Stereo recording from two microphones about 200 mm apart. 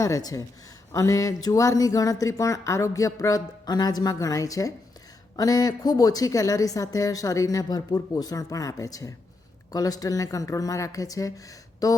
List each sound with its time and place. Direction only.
0.0 s a woman's voice: 15° left (ahead or behind)